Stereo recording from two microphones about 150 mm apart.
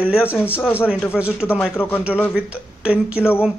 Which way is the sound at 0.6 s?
15° left (ahead or behind).